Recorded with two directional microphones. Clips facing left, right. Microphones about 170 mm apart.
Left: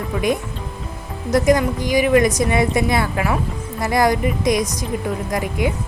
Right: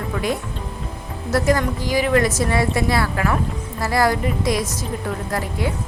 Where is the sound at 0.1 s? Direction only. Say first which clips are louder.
Left 4 dB; 15° left (ahead or behind).